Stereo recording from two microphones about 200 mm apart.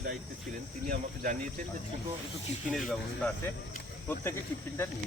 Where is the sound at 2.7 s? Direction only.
Centre (ahead or behind).